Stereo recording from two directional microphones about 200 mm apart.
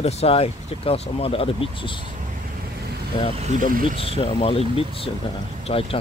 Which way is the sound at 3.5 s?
40° right (ahead or behind).